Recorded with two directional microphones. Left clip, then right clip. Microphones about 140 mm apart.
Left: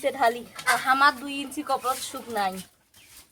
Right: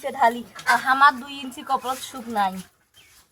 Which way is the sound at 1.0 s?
40° left (ahead or behind).